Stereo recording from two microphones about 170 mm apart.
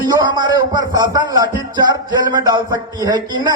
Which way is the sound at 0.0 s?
25° right (ahead or behind).